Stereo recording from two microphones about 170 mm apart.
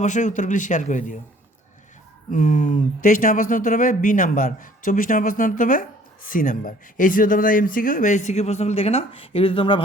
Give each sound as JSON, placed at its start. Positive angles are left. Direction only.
{"t": 0.0, "sound": "speech", "side_deg": 45}
{"t": 2.3, "sound": "speech", "side_deg": 45}